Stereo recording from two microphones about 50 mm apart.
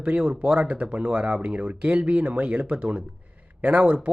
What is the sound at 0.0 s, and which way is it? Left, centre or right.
Speech, right.